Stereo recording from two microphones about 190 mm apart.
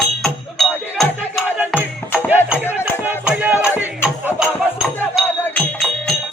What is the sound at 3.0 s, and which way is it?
Music, 10° right (ahead or behind).